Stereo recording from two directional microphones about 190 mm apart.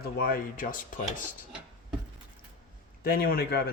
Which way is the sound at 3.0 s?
50° left (ahead or behind).